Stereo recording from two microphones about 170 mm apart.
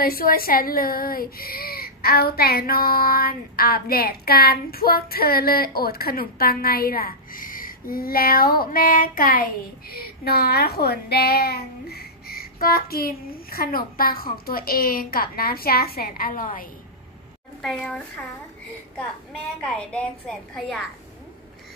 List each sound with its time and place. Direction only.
0.0 s speech: 60° left (ahead or behind)
17.6 s a woman's voice: 5° left (ahead or behind)
19.6 s a woman's voice: 5° left (ahead or behind)